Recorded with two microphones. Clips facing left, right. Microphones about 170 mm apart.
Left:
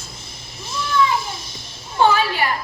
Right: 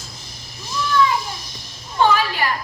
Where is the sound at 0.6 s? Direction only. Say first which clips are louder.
Right 1 dB; 25° left (ahead or behind).